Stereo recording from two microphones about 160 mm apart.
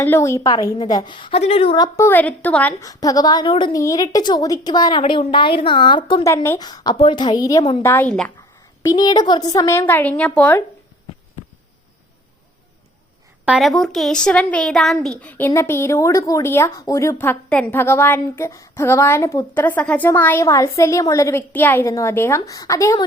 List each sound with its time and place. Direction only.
0.0 s a woman's voice: 15° left (ahead or behind)
2.0 s speech: 10° left (ahead or behind)
2.8 s a woman's voice: 20° left (ahead or behind)
6.2 s a woman's voice: 15° left (ahead or behind)
8.8 s speech: 20° left (ahead or behind)
13.4 s speech: 5° right (ahead or behind); by 23.0 s 20° left (ahead or behind)